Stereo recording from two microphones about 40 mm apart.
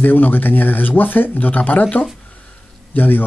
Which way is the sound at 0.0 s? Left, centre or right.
Left.